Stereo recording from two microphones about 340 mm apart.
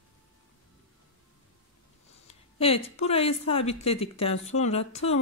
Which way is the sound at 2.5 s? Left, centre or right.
Centre.